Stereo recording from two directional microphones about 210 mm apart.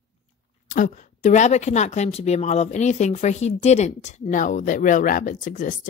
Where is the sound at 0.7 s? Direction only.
40° left (ahead or behind).